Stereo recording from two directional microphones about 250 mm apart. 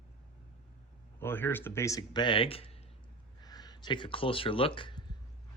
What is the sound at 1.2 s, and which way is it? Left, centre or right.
Speech, centre.